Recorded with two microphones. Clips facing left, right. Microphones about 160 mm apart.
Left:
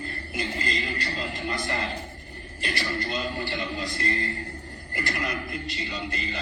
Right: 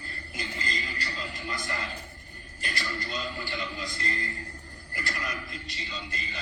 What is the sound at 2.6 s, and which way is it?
A man's voice, 65° left (ahead or behind).